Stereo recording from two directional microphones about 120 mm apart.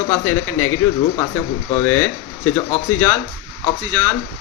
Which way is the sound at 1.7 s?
20° left (ahead or behind).